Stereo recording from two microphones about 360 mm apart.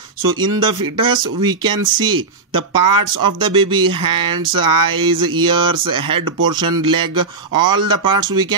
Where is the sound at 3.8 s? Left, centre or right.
Right.